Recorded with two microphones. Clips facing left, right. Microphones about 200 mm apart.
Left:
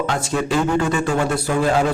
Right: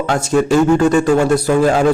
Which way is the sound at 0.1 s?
45° right (ahead or behind).